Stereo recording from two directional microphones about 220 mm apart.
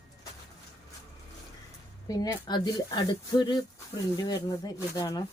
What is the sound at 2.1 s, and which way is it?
Speech, 15° left (ahead or behind).